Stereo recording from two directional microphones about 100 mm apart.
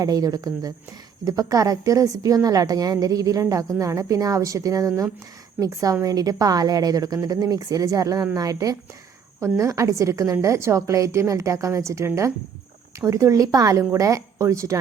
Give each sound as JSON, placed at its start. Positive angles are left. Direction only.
{"t": 0.0, "sound": "a woman's voice", "side_deg": -35}